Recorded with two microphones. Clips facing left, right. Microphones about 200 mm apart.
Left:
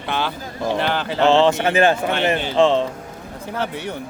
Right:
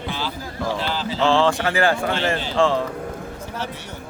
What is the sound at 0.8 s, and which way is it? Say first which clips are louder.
Speech: left 4 dB; 60° left (ahead or behind).